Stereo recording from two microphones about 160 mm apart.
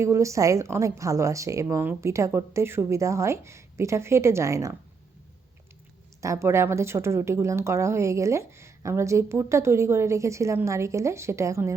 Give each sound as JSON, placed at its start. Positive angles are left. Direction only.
{"t": 0.0, "sound": "a woman's voice", "side_deg": -20}
{"t": 6.2, "sound": "speech", "side_deg": -20}